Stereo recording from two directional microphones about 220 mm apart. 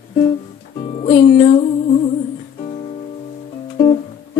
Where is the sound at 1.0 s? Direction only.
25° left (ahead or behind).